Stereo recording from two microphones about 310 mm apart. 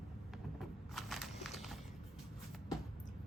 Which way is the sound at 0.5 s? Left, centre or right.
Centre.